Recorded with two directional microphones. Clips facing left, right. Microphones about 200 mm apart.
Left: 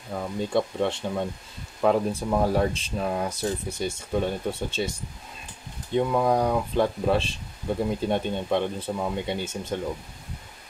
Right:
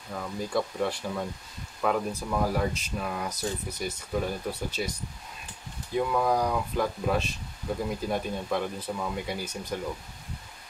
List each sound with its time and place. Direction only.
0.2 s speech: 25° left (ahead or behind)